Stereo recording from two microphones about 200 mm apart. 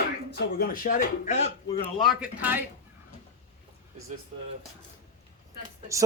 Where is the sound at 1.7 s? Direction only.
25° left (ahead or behind).